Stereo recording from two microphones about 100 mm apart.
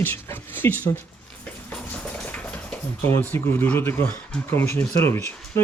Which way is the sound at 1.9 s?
10° left (ahead or behind).